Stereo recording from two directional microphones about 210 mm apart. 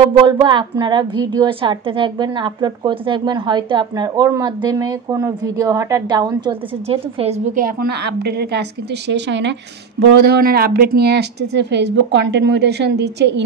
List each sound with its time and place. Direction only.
0.1 s a woman's voice: 20° right (ahead or behind); by 13.4 s 55° right (ahead or behind)